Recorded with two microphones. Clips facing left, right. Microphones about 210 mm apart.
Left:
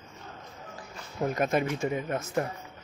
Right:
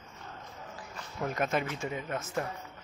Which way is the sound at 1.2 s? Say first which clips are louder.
Left 4 dB; 35° left (ahead or behind).